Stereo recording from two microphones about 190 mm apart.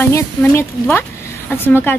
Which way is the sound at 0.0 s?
10° left (ahead or behind).